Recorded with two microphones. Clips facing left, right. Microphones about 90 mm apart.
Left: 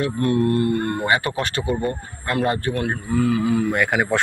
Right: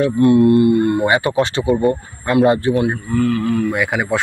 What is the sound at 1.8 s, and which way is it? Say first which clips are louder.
Speech: right 8 dB; 10° right (ahead or behind).